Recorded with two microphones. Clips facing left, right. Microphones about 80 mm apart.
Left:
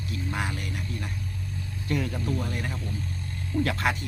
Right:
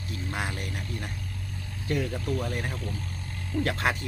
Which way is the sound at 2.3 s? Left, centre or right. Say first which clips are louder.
Right 1 dB; right.